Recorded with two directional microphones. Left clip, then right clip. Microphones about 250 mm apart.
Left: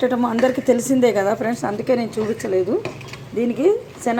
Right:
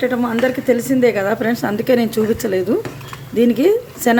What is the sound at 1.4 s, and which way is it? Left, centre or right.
A woman's voice, centre.